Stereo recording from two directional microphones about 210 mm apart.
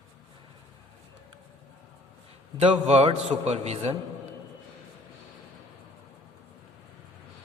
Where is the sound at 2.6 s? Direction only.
30° right (ahead or behind).